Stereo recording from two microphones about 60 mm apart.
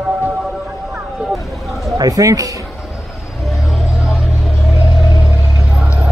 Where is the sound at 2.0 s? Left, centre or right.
Right.